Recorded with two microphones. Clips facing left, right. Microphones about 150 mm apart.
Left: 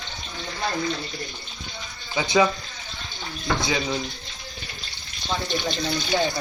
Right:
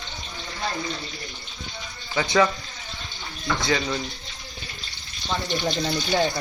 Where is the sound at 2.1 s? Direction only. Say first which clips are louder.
Even; 10° left (ahead or behind).